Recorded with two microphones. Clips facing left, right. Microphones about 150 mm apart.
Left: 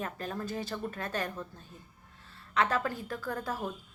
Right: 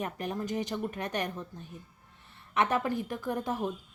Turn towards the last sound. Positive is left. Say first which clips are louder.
# right 3 dB
turn(degrees=-20)  # may be behind; listen again after turning